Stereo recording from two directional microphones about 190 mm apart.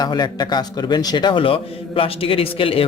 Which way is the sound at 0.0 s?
20° left (ahead or behind).